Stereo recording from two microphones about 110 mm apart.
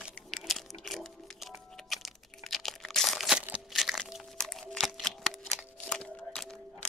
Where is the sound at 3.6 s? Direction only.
Centre (ahead or behind).